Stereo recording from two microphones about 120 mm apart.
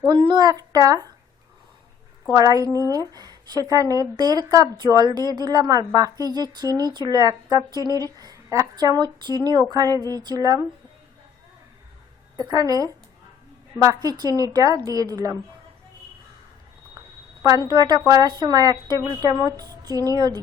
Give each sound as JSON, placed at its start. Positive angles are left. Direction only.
{"t": 0.1, "sound": "a woman's voice", "side_deg": -40}
{"t": 2.3, "sound": "a woman's voice", "side_deg": -30}
{"t": 7.7, "sound": "speech", "side_deg": 30}
{"t": 8.0, "sound": "a woman's voice", "side_deg": -30}
{"t": 12.4, "sound": "a woman's voice", "side_deg": -30}
{"t": 17.4, "sound": "a woman's voice", "side_deg": -35}